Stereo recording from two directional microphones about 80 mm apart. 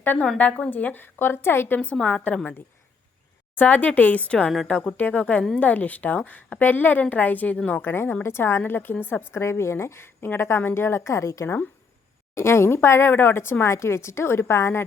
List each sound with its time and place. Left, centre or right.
0.3 s a woman's voice: centre
1.8 s a woman's voice: centre
4.7 s a woman's voice: centre
7.9 s a woman's voice: left